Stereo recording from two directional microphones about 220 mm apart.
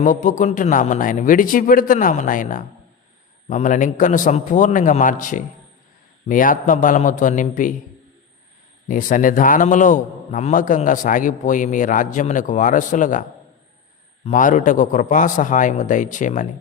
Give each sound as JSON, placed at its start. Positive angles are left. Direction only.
{"t": 0.0, "sound": "a man's voice", "side_deg": 35}
{"t": 8.9, "sound": "a man's voice", "side_deg": 40}
{"t": 14.3, "sound": "a man's voice", "side_deg": 35}